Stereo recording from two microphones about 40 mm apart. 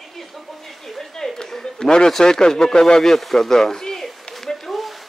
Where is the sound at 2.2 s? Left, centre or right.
Centre.